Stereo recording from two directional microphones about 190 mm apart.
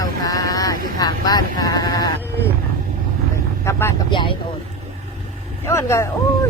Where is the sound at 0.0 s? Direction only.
20° left (ahead or behind).